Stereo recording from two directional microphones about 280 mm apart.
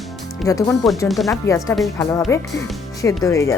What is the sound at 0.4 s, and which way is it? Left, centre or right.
Speech, centre.